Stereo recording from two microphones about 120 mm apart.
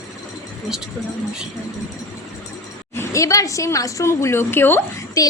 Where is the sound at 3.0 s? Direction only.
25° left (ahead or behind).